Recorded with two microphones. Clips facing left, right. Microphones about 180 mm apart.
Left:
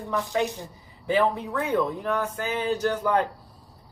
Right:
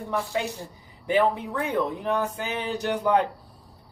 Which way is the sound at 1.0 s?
15° right (ahead or behind).